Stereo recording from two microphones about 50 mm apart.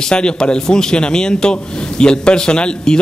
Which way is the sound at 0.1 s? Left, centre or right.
Centre.